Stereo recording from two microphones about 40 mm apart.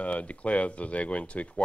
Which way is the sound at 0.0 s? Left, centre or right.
Left.